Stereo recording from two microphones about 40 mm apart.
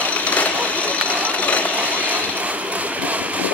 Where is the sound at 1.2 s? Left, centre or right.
Left.